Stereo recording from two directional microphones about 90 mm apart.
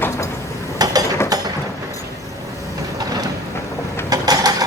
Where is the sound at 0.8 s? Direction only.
45° right (ahead or behind).